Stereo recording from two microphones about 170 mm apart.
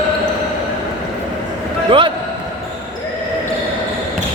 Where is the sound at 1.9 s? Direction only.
30° right (ahead or behind).